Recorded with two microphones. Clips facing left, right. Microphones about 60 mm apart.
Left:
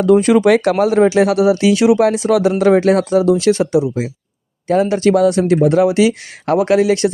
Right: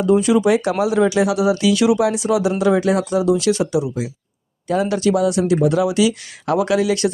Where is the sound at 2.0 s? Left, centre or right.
Left.